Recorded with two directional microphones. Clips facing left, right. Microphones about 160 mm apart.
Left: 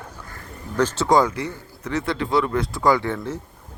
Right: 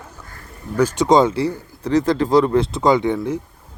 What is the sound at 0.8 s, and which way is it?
Speech, 10° right (ahead or behind).